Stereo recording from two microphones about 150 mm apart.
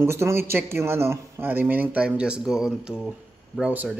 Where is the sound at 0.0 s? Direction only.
15° right (ahead or behind).